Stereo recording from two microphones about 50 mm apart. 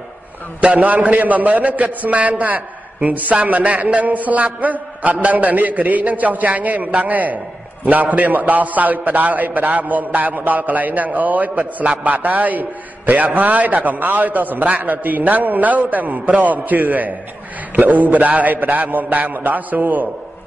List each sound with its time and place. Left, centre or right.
0.6 s a man's voice: right